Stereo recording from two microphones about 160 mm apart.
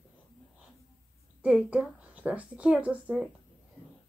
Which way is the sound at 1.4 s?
10° right (ahead or behind).